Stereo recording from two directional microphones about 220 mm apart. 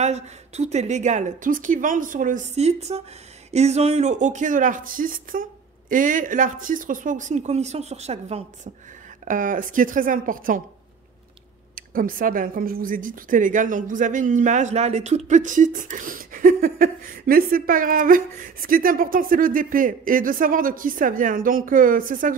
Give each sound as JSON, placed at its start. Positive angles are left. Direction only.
{"t": 0.0, "sound": "speech", "side_deg": -30}
{"t": 11.7, "sound": "speech", "side_deg": -40}